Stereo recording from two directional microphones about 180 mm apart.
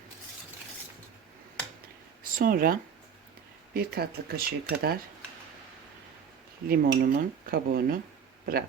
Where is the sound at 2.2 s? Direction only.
50° right (ahead or behind).